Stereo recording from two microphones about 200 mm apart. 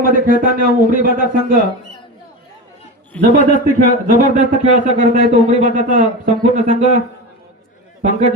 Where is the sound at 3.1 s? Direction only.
5° left (ahead or behind).